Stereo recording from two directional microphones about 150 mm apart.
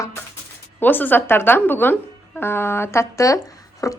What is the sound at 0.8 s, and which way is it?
Speech, 10° left (ahead or behind).